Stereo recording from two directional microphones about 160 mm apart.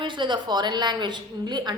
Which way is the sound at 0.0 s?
30° right (ahead or behind).